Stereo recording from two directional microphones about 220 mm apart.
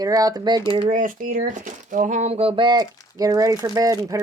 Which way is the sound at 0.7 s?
30° right (ahead or behind).